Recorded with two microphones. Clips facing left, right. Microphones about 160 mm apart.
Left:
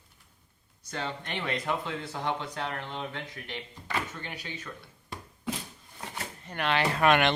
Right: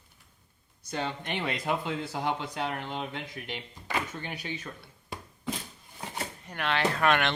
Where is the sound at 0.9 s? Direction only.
15° right (ahead or behind).